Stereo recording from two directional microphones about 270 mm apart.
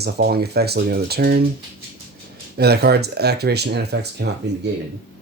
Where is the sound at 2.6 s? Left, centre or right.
Right.